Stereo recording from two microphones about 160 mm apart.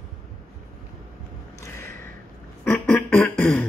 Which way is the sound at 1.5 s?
15° left (ahead or behind).